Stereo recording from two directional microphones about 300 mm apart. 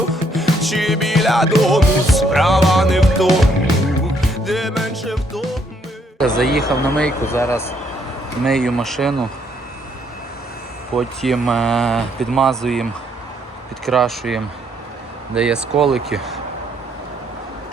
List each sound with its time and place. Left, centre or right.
0.1 s music: centre
6.1 s speech: centre
10.9 s speech: centre